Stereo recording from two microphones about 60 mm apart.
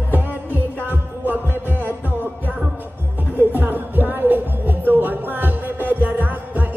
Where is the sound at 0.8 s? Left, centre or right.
Right.